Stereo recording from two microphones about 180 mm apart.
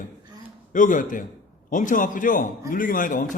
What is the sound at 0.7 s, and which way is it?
A man's voice, 45° left (ahead or behind).